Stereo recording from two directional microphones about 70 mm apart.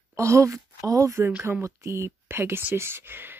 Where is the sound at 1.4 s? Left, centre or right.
Right.